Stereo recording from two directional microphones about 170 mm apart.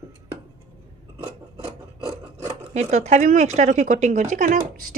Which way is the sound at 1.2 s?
20° left (ahead or behind).